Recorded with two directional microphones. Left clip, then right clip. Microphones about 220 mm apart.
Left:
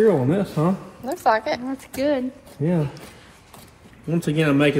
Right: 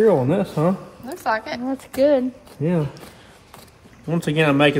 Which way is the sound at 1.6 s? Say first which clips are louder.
Right 5 dB; 50° right (ahead or behind).